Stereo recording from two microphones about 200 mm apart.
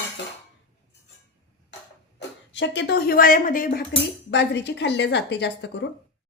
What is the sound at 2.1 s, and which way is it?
A woman's voice, 65° left (ahead or behind).